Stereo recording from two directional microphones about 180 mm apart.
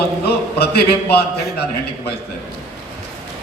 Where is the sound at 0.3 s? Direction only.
60° left (ahead or behind).